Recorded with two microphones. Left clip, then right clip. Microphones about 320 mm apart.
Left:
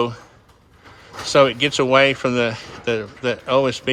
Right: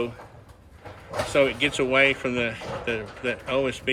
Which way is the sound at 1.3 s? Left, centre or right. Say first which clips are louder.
Left 7 dB; left.